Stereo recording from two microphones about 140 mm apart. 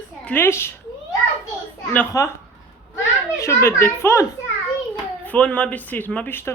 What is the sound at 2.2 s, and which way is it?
Speech, 25° left (ahead or behind).